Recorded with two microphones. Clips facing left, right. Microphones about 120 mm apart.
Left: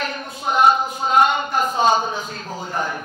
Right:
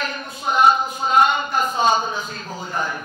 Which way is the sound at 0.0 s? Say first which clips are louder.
Left 1 dB; 55° left (ahead or behind).